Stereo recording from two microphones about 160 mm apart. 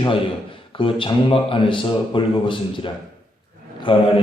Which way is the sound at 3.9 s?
30° left (ahead or behind).